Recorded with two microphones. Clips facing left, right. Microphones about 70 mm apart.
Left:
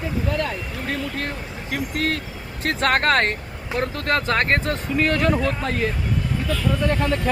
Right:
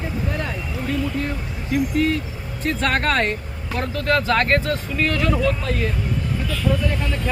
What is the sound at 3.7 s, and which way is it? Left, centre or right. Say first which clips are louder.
Speech: right 1 dB; left.